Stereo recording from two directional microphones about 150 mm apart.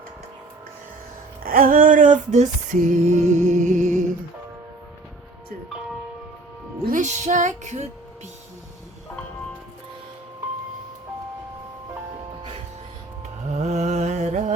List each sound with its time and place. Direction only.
1.5 s music: 70° right (ahead or behind); by 4.0 s 50° right (ahead or behind)
6.8 s music: 55° right (ahead or behind)
13.5 s music: 50° right (ahead or behind)